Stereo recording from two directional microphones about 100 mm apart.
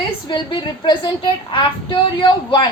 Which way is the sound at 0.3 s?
50° left (ahead or behind).